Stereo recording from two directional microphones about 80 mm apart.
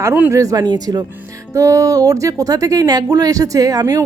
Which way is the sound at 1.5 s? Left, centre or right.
Right.